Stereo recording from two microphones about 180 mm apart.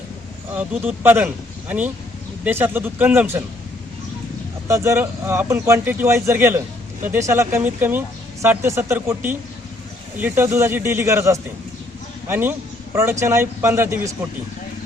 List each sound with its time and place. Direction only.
0.5 s speech: 10° right (ahead or behind)
4.7 s speech: 15° right (ahead or behind)